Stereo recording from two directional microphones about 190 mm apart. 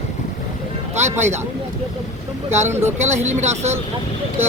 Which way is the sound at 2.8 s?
35° right (ahead or behind).